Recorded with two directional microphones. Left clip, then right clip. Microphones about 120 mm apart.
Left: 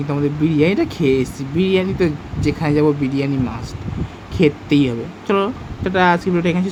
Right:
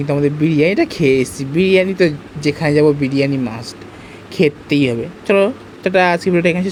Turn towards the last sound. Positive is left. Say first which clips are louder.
# right 4 dB
turn(degrees=-35)  # may be behind; listen again after turning